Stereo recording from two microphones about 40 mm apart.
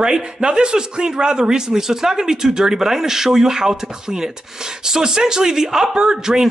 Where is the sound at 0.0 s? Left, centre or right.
Centre.